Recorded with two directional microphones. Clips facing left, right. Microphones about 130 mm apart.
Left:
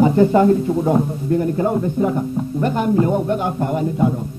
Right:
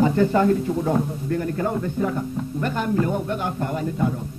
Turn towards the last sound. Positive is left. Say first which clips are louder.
# left 6 dB
turn(degrees=20)  # may be behind; listen again after turning